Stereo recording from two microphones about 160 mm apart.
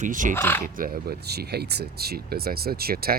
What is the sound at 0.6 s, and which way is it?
Speech, 60° right (ahead or behind).